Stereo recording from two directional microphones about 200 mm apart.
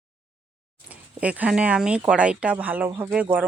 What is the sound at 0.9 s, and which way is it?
Speech, 5° right (ahead or behind).